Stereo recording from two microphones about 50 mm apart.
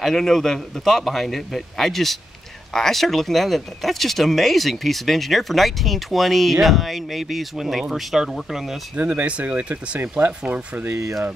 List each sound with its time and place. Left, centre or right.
0.0 s speech: centre
8.9 s speech: right
10.9 s speech: right